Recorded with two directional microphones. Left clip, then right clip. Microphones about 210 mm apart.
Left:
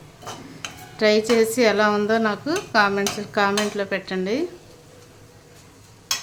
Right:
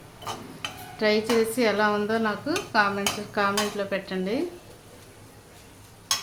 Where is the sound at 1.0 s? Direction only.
20° left (ahead or behind).